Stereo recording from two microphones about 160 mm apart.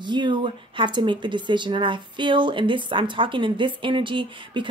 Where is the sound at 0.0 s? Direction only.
30° right (ahead or behind).